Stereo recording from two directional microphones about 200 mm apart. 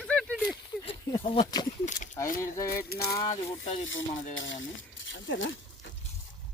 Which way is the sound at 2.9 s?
50° left (ahead or behind).